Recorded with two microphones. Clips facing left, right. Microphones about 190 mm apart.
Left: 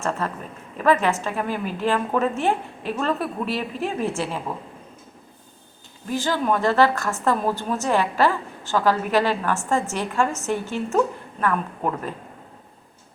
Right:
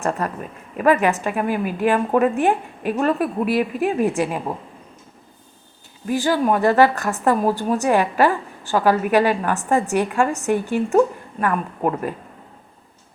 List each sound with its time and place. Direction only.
0.0 s a woman's voice: 15° right (ahead or behind)
6.1 s a woman's voice: 15° right (ahead or behind)